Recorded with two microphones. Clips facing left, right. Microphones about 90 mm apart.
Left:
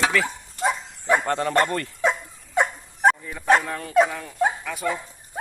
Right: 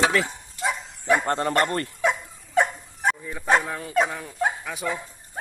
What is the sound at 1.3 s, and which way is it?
Speech, 30° right (ahead or behind).